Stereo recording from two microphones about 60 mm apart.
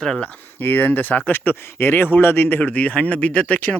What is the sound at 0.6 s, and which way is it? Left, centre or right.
Speech, left.